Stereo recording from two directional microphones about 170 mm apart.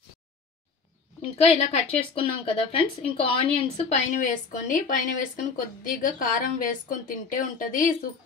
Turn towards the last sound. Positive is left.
turn(degrees=50)  # may be behind; listen again after turning